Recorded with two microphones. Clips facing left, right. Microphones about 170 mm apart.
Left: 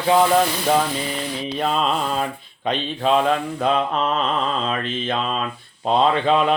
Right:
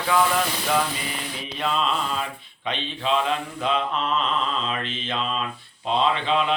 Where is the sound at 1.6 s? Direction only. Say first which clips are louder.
Left 3 dB; 45° left (ahead or behind).